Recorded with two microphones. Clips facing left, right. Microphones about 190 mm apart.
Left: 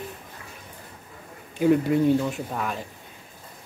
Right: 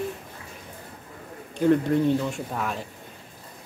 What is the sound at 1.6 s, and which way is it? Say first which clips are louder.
Speech: left 1 dB; 5° left (ahead or behind).